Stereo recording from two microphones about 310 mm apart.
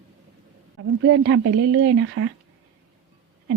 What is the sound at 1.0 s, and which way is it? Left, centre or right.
A woman's voice, right.